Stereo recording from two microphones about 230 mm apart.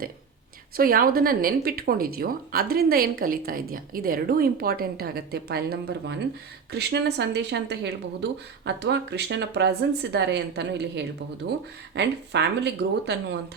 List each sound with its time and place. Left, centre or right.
0.8 s speech: right